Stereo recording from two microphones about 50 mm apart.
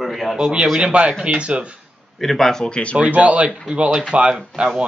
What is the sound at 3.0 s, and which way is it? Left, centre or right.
A man's voice, right.